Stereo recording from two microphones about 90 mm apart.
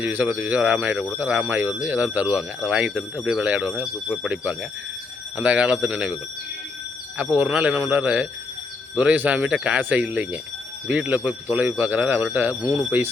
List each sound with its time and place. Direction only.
0.0 s speech: 20° right (ahead or behind)
7.2 s speech: 15° right (ahead or behind)